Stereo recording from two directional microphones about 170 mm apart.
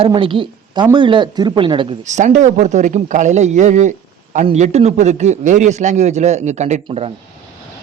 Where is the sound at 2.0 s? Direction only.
45° right (ahead or behind).